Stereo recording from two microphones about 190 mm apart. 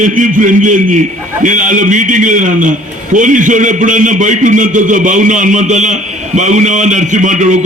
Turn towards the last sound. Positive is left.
turn(degrees=-40)  # may be behind; listen again after turning